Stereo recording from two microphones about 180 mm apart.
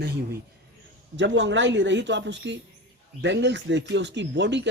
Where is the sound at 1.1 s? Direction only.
90° right.